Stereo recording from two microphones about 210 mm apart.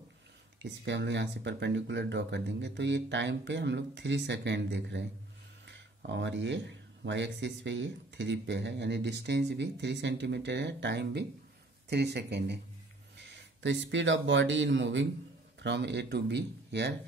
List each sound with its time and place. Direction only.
0.6 s speech: 60° right (ahead or behind)